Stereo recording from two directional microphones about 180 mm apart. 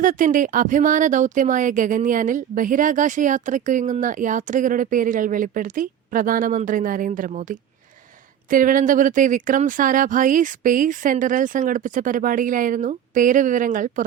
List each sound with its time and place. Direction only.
0.0 s speech: 45° right (ahead or behind)